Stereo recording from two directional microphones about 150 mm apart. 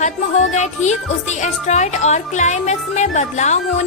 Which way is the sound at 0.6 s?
50° left (ahead or behind).